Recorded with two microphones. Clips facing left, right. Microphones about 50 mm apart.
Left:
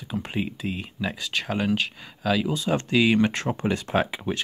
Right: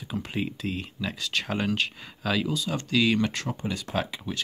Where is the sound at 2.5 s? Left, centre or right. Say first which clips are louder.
Left 5 dB; left.